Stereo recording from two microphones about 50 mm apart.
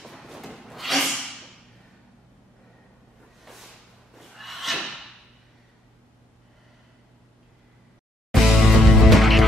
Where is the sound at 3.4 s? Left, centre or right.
Centre.